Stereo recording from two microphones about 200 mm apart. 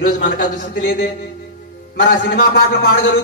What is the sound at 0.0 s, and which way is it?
Speech, 45° left (ahead or behind).